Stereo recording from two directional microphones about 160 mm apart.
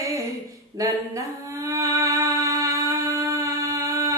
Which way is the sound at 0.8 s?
20° right (ahead or behind).